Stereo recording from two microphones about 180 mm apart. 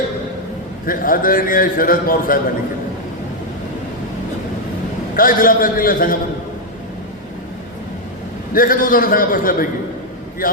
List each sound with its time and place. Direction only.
0.9 s a man's voice: 50° left (ahead or behind)
5.1 s a man's voice: 50° left (ahead or behind)
8.5 s a man's voice: 50° left (ahead or behind)